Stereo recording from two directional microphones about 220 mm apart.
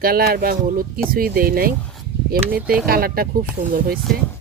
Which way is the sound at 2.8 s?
40° right (ahead or behind).